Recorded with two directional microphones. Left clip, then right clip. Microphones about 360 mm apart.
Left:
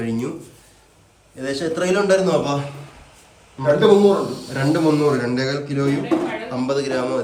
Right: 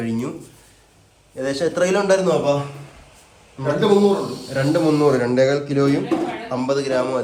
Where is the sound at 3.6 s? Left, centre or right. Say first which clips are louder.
Left 3 dB; centre.